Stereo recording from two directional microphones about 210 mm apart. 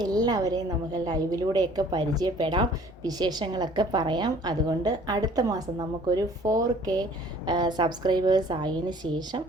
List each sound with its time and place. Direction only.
0.0 s a woman's voice: 20° right (ahead or behind)